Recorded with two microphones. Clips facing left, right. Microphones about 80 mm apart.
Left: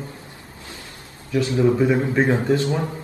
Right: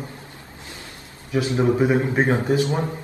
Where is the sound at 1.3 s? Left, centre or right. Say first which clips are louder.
Left 1 dB; right.